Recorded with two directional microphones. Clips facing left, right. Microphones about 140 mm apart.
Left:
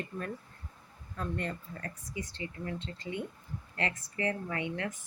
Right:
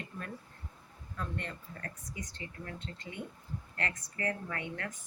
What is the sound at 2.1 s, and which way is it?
Speech, 45° right (ahead or behind).